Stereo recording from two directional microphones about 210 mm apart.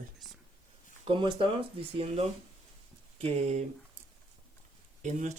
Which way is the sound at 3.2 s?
30° right (ahead or behind).